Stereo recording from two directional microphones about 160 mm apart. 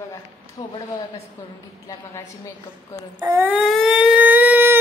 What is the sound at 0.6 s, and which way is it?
Speech, 25° left (ahead or behind).